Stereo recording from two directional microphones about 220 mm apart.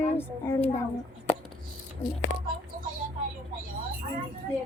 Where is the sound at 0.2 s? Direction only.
10° left (ahead or behind).